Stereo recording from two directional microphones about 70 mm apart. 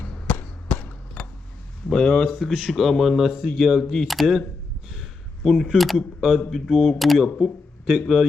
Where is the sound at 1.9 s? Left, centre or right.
Centre.